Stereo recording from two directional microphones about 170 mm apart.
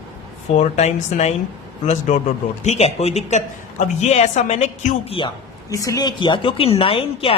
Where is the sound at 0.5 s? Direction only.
40° left (ahead or behind).